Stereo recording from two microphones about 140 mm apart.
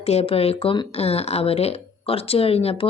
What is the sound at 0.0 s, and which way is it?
Speech, 45° left (ahead or behind).